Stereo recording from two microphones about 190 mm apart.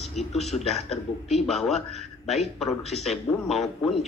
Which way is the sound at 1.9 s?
35° left (ahead or behind).